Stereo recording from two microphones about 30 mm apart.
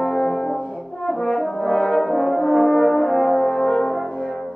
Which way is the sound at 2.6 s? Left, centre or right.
Left.